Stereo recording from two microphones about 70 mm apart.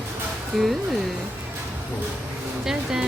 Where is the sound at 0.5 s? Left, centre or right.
Centre.